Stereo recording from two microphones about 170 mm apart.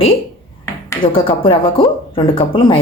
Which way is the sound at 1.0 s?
30° left (ahead or behind).